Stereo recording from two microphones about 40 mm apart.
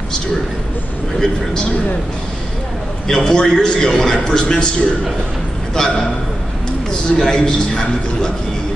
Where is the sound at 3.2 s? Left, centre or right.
Centre.